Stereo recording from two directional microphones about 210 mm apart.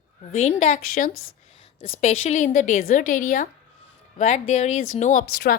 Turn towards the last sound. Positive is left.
turn(degrees=40)  # may be behind; listen again after turning